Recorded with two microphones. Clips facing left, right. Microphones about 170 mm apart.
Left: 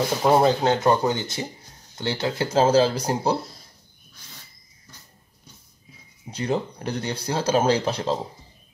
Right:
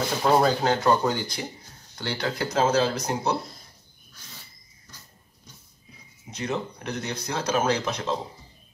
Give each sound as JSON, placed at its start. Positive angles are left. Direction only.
{"t": 0.2, "sound": "speech", "side_deg": 20}
{"t": 6.3, "sound": "speech", "side_deg": 30}